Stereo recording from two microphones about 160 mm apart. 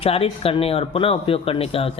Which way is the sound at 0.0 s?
35° left (ahead or behind).